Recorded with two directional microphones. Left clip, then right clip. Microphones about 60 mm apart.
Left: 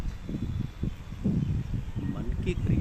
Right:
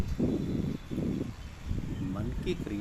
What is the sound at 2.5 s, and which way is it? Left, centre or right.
Speech, centre.